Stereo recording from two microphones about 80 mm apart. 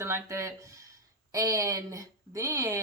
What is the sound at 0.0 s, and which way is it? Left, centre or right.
A woman's voice, right.